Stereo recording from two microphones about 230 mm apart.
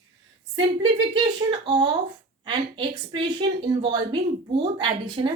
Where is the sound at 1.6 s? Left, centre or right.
Right.